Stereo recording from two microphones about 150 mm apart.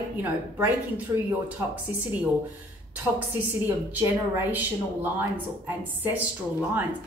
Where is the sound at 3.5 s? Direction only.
15° right (ahead or behind).